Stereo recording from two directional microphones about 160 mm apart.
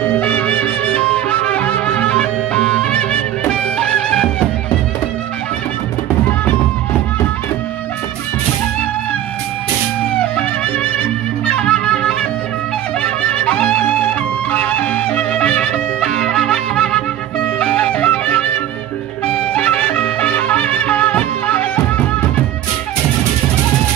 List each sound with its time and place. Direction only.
0.1 s music: 10° left (ahead or behind)
10.1 s music: 10° left (ahead or behind)